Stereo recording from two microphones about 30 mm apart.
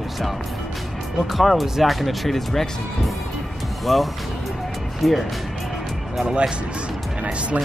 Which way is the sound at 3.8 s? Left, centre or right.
Centre.